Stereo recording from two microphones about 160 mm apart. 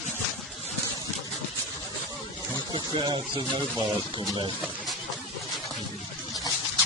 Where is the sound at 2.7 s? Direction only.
30° right (ahead or behind).